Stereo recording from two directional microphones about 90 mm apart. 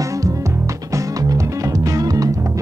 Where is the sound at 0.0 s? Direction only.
35° right (ahead or behind).